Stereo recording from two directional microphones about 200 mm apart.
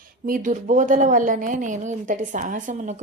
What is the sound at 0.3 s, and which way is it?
A woman's voice, 40° right (ahead or behind).